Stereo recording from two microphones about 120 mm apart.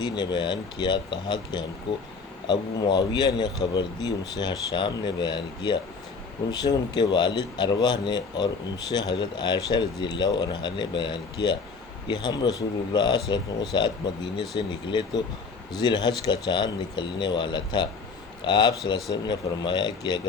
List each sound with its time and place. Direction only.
0.0 s speech: 35° left (ahead or behind)